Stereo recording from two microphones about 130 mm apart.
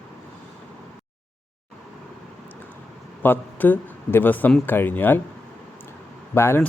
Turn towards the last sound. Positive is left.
turn(degrees=15)  # may be behind; listen again after turning